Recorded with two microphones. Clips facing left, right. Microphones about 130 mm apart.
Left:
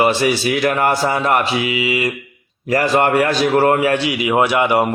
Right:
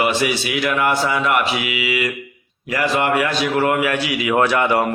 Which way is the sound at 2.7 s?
40° left (ahead or behind).